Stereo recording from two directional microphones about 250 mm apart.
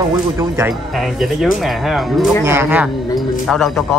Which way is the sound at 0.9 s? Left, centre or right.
Centre.